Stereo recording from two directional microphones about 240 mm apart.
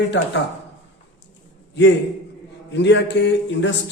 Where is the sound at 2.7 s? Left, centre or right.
Left.